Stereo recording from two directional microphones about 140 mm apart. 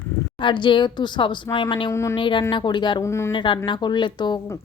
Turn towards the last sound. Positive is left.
turn(degrees=30)  # may be behind; listen again after turning